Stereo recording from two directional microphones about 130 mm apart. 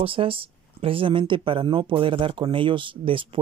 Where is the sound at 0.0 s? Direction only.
45° right (ahead or behind).